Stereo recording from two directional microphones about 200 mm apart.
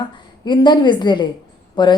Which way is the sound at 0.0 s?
20° left (ahead or behind).